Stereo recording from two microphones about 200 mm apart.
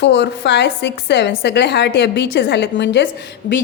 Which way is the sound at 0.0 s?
60° left (ahead or behind).